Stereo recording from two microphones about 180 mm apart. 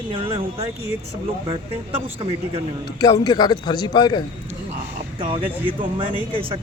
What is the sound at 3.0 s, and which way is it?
A man's voice, 20° left (ahead or behind).